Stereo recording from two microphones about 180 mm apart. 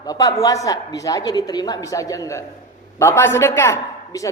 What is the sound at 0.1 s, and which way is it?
A woman's voice, 20° left (ahead or behind).